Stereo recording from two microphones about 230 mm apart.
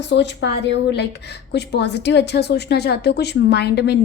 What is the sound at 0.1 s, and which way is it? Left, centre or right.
A woman's voice, left.